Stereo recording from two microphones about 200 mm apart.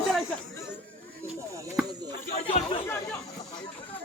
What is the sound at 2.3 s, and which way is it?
Chatter, 30° left (ahead or behind).